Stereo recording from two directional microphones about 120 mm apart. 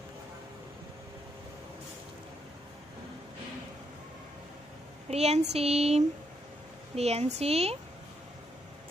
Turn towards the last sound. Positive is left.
turn(degrees=-60)  # may be behind; listen again after turning